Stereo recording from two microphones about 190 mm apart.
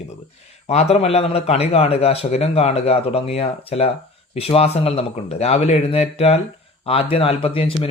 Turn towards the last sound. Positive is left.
turn(degrees=30)  # may be behind; listen again after turning